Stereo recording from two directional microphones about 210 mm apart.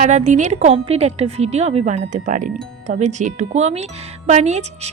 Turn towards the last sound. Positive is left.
turn(degrees=-30)  # may be behind; listen again after turning